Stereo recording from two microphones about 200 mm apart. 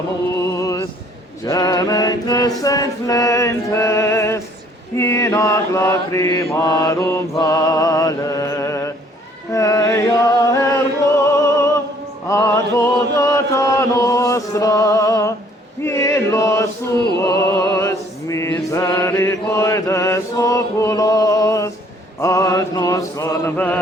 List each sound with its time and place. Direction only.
0.3 s music: 15° left (ahead or behind)
1.5 s mantra: 15° left (ahead or behind)
2.6 s music: 15° left (ahead or behind)
4.9 s mantra: 15° left (ahead or behind)
9.5 s music: 15° left (ahead or behind)
12.3 s chant: 15° left (ahead or behind)
15.8 s male singing: 15° left (ahead or behind)
17.2 s music: 15° left (ahead or behind)
22.2 s mantra: 15° left (ahead or behind)